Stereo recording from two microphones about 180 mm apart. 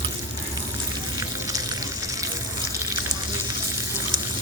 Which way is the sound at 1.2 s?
20° right (ahead or behind).